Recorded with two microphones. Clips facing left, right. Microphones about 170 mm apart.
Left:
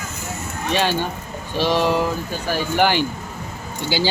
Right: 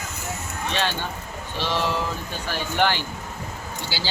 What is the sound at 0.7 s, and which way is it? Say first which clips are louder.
Speech: left 7 dB; 10° left (ahead or behind).